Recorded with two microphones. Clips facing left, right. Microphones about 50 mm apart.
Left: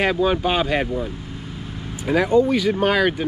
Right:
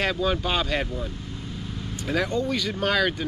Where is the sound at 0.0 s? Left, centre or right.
Centre.